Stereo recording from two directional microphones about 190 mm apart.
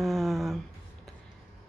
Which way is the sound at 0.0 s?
Centre (ahead or behind).